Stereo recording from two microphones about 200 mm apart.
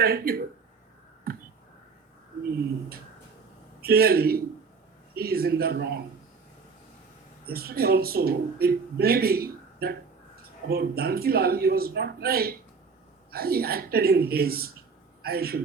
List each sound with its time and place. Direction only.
0.0 s speech: 50° right (ahead or behind)
1.3 s a sound: 50° right (ahead or behind)
3.8 s speech: 50° right (ahead or behind)
7.4 s a man's voice: 50° right (ahead or behind)